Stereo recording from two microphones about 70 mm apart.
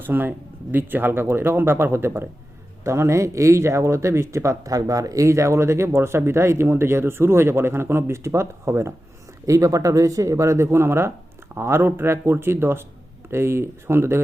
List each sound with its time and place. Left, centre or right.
0.0 s speech: right